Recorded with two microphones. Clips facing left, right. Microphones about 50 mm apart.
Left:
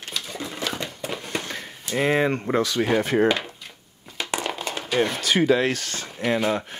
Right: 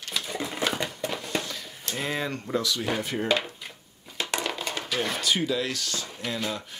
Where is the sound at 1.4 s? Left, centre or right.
Left.